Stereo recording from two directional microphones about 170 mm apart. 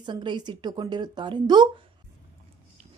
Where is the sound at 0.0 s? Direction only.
25° right (ahead or behind).